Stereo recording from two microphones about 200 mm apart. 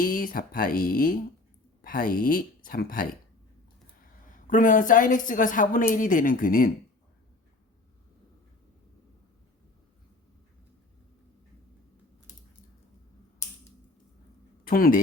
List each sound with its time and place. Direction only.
0.0 s speech: 45° left (ahead or behind)
4.3 s a woman's voice: 40° left (ahead or behind)
14.7 s speech: 45° left (ahead or behind)